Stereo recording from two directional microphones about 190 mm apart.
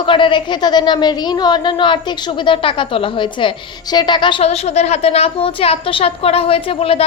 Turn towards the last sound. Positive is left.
turn(degrees=30)  # may be behind; listen again after turning